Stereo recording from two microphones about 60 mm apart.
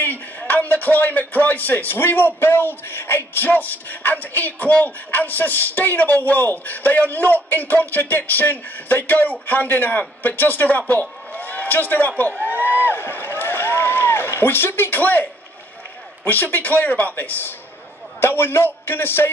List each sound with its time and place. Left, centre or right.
0.0 s a man's voice: left
12.6 s a sound: left
15.0 s a man's voice: left
16.3 s a man's voice: left